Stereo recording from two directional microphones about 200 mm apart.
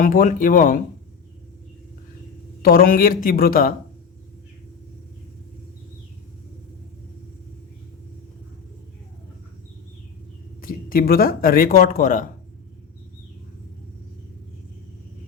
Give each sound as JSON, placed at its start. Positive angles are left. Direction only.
{"t": 0.0, "sound": "speech", "side_deg": 45}
{"t": 2.6, "sound": "speech", "side_deg": 45}
{"t": 10.6, "sound": "speech", "side_deg": 45}